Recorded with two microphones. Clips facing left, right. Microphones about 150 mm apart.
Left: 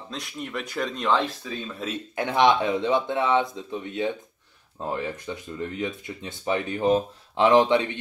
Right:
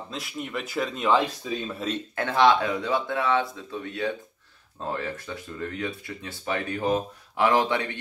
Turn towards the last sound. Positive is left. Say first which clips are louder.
# left 4 dB
turn(degrees=20)  # may be behind; listen again after turning